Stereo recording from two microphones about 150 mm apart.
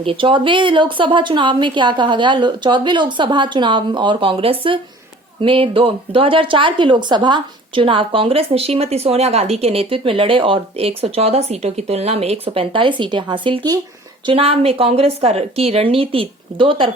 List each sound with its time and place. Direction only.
0.0 s speech: 35° right (ahead or behind)